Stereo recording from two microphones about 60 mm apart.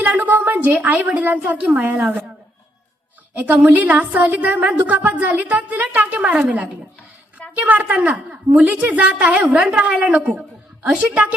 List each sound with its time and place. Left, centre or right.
0.0 s a woman's voice: right
3.3 s a woman's voice: right